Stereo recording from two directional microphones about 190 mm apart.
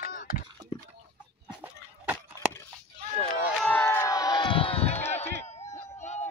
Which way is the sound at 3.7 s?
10° left (ahead or behind).